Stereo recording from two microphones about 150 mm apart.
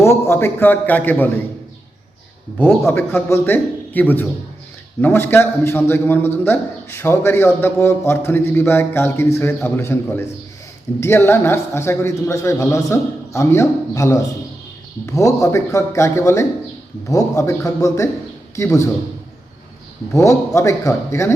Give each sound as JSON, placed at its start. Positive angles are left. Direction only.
{"t": 0.0, "sound": "a man's voice", "side_deg": 15}
{"t": 2.6, "sound": "a man's voice", "side_deg": 10}
{"t": 20.1, "sound": "a man's voice", "side_deg": 20}